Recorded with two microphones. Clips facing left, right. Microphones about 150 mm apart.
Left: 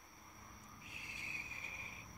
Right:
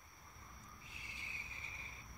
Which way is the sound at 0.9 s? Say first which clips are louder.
Left 3 dB; 15° left (ahead or behind).